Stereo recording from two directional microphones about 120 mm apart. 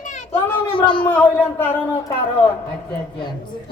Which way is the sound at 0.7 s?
45° left (ahead or behind).